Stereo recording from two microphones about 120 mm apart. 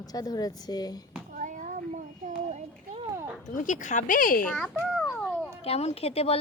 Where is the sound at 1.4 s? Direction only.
90° right.